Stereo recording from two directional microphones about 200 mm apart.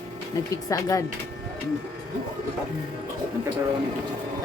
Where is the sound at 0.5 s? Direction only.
15° left (ahead or behind).